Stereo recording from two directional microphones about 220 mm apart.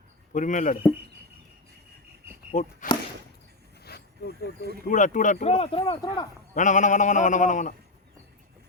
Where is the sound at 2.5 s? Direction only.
35° left (ahead or behind).